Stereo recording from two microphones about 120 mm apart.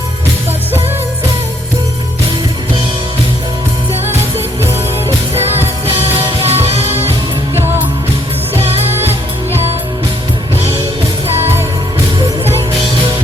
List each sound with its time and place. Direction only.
6.4 s music: 55° right (ahead or behind)